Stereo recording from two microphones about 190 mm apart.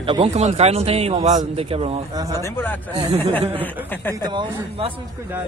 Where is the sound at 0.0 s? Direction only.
30° right (ahead or behind).